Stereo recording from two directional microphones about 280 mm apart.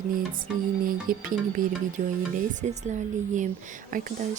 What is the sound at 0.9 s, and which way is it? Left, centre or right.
Music, right.